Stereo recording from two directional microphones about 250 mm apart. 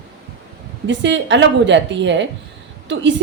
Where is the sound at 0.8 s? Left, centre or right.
Right.